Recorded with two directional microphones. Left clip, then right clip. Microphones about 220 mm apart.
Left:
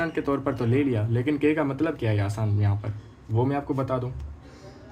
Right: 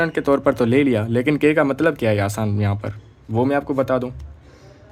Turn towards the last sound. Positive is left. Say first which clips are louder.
# right 8 dB
turn(degrees=-50)  # may be behind; listen again after turning